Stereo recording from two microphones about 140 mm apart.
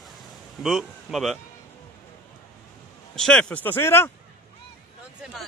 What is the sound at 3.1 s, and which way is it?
Speech, 5° left (ahead or behind).